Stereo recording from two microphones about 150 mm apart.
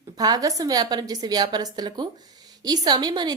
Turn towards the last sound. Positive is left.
turn(degrees=-30)  # may be behind; listen again after turning